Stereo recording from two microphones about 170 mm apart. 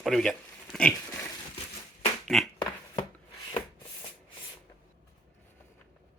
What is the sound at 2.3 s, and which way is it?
Speech, centre (ahead or behind).